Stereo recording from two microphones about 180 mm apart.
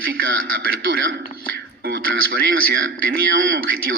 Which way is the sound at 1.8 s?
60° right (ahead or behind).